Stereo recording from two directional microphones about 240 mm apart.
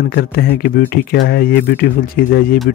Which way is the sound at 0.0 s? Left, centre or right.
Left.